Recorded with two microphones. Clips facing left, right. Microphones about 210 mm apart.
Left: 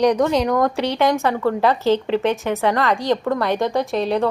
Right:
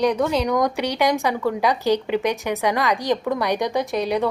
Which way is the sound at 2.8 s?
15° right (ahead or behind).